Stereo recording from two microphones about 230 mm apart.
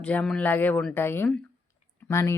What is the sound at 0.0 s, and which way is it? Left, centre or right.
Speech, centre.